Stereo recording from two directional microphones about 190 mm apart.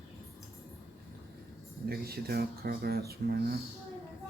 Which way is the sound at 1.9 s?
55° right (ahead or behind).